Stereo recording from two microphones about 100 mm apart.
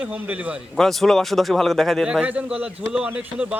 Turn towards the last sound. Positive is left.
turn(degrees=-15)  # may be behind; listen again after turning